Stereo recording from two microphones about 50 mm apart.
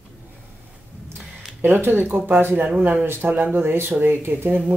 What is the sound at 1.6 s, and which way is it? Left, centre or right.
Speech, right.